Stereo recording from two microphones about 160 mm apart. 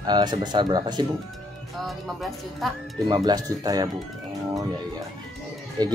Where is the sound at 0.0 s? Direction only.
25° right (ahead or behind).